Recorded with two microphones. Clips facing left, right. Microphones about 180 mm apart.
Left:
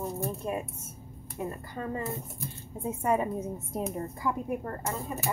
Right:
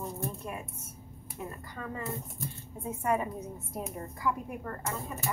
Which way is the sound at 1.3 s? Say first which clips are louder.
Left 5 dB; 25° left (ahead or behind).